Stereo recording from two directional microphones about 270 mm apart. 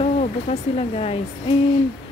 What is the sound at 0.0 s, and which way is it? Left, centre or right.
Speech, left.